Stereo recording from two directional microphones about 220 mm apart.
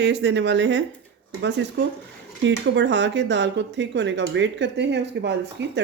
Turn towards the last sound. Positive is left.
turn(degrees=-50)  # may be behind; listen again after turning